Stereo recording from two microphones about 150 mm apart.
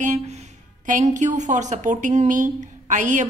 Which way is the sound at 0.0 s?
50° right (ahead or behind).